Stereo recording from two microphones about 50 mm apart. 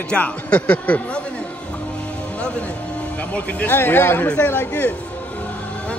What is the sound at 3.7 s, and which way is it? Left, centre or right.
Speech, left.